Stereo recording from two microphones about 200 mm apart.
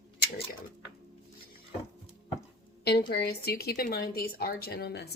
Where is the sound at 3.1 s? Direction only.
50° left (ahead or behind).